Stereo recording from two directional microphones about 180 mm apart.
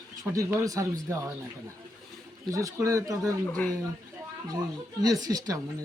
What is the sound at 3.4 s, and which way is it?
Speech, 5° left (ahead or behind).